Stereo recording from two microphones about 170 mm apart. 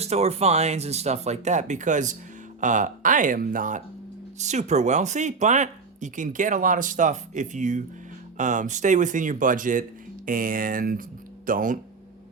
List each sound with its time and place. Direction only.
0.0 s speech: 40° right (ahead or behind)